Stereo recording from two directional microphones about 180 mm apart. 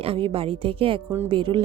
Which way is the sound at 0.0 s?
30° right (ahead or behind).